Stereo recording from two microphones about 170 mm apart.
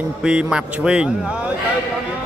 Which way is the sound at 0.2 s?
5° right (ahead or behind).